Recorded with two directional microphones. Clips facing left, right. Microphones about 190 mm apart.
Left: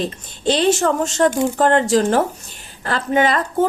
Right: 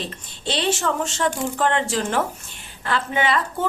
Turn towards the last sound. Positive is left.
turn(degrees=40)  # may be behind; listen again after turning